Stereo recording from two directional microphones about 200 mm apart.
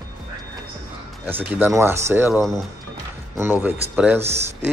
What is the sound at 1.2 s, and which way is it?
A man's voice, 10° right (ahead or behind).